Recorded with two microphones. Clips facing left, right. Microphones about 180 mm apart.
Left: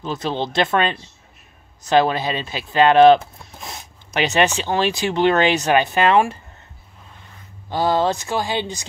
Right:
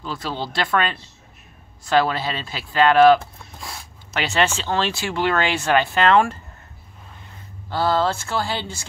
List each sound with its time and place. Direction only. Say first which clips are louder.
0.0 s speech: left 4 dB; 20° left (ahead or behind)
7.7 s speech: left 2 dB; 15° left (ahead or behind)